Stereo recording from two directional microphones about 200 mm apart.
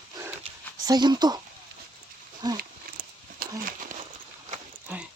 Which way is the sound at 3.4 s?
45° right (ahead or behind).